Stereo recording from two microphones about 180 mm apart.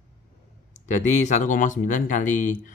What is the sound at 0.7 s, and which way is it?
Speech, 40° left (ahead or behind).